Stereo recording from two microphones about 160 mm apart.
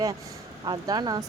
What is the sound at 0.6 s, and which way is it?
Speech, 25° right (ahead or behind).